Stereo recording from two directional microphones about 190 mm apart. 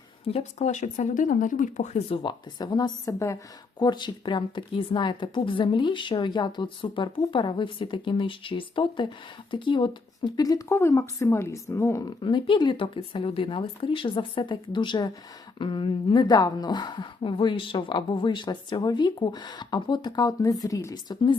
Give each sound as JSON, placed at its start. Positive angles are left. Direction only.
{"t": 0.3, "sound": "a woman's voice", "side_deg": 35}